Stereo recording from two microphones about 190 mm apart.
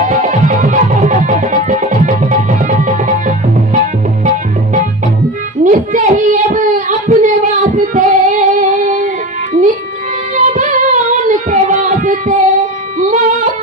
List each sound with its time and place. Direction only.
0.1 s music: 40° right (ahead or behind)
5.6 s a sound: 45° right (ahead or behind)
10.3 s singing: 40° right (ahead or behind)
13.0 s music: 40° right (ahead or behind)